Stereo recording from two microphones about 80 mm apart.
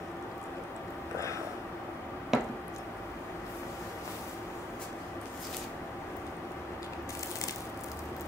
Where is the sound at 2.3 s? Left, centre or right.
Centre.